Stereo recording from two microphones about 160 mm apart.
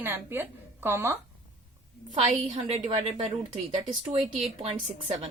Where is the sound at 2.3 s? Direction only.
40° right (ahead or behind).